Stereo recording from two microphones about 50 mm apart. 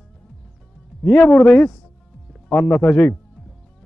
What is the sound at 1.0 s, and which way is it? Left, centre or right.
A man's voice, left.